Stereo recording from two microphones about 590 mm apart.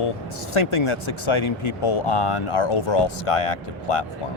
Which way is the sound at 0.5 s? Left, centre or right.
Left.